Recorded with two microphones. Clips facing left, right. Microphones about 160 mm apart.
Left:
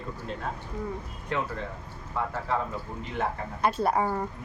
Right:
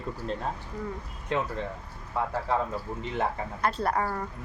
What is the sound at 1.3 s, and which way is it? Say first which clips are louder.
Speech: right 2 dB; 20° right (ahead or behind).